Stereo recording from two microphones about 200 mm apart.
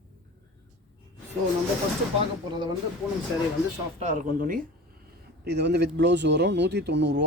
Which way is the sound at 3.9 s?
35° right (ahead or behind).